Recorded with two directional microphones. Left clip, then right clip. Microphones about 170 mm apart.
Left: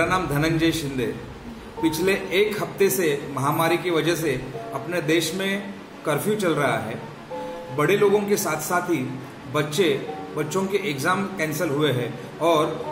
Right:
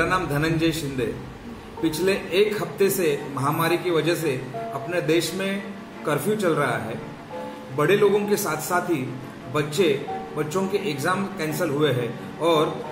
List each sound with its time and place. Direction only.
0.0 s a man's voice: 10° left (ahead or behind)